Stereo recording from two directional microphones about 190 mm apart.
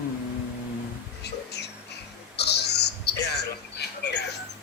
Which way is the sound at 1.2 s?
60° left (ahead or behind).